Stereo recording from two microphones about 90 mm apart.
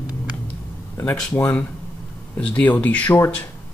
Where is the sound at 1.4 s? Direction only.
20° left (ahead or behind).